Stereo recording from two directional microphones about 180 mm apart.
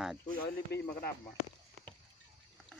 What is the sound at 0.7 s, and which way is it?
Speech, 65° left (ahead or behind).